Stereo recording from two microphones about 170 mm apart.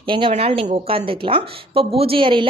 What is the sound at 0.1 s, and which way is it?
A woman's voice, 30° right (ahead or behind).